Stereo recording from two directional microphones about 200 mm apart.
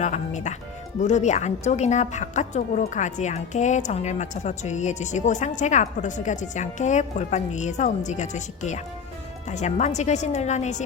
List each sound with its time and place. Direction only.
0.0 s a woman's voice: 35° left (ahead or behind)